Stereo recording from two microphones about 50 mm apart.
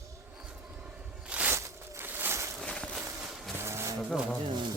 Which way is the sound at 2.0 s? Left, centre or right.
Right.